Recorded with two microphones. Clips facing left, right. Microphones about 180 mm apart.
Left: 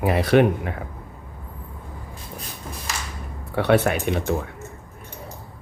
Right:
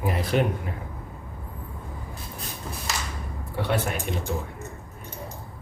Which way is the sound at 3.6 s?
70° left (ahead or behind).